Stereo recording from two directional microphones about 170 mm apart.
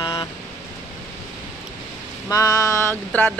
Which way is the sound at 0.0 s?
25° left (ahead or behind).